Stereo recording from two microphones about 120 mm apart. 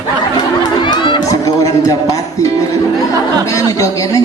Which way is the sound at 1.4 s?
30° left (ahead or behind).